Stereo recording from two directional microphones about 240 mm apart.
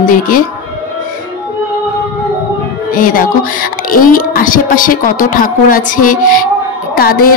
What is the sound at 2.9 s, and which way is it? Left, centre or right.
A woman's voice, left.